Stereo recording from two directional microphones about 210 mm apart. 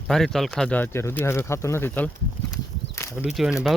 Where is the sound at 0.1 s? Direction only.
Centre (ahead or behind).